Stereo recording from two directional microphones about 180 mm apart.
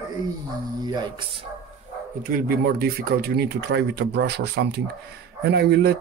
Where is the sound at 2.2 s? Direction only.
55° right (ahead or behind).